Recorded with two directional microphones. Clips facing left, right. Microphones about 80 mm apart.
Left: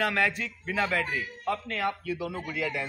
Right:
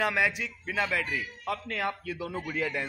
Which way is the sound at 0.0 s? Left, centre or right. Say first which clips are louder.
Even; centre.